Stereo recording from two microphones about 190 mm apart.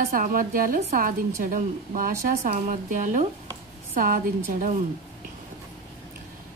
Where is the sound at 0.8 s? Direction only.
35° right (ahead or behind).